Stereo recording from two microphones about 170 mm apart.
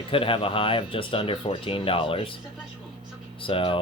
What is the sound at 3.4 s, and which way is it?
Speech, 30° left (ahead or behind).